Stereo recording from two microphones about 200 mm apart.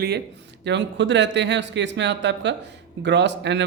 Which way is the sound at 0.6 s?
60° right (ahead or behind).